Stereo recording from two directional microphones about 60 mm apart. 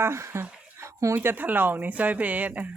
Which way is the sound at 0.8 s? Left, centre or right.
Right.